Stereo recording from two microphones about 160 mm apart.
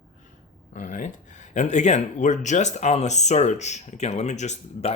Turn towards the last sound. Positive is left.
turn(degrees=45)  # may be behind; listen again after turning